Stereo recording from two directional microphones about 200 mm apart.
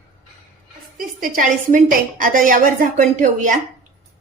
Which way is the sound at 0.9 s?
45° right (ahead or behind).